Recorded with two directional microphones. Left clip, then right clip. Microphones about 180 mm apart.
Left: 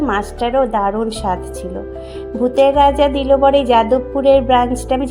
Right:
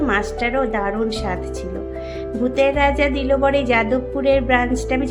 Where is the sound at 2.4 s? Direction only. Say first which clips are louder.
Left 6 dB; 15° left (ahead or behind).